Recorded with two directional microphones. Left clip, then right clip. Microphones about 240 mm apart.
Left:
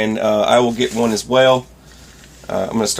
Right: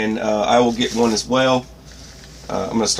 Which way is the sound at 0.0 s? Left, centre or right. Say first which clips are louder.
Left 4 dB; left.